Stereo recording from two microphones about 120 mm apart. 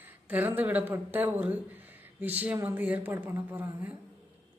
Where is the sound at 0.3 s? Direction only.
15° right (ahead or behind).